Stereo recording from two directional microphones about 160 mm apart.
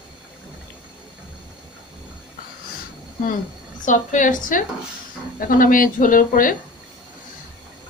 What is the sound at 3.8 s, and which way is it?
A woman's voice, 50° left (ahead or behind).